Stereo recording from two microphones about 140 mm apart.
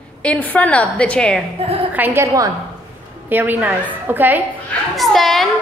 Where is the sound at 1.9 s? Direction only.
15° right (ahead or behind).